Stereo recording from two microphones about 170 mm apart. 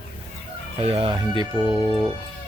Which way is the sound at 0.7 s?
35° right (ahead or behind).